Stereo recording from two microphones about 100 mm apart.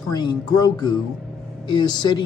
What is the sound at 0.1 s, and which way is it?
Speech, 45° left (ahead or behind).